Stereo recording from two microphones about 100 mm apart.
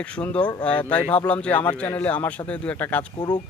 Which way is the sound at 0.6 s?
15° left (ahead or behind).